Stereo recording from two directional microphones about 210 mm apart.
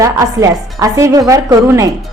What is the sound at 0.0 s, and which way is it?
Speech, 15° right (ahead or behind).